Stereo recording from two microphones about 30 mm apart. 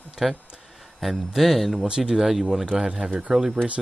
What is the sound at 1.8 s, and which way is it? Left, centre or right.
Speech, right.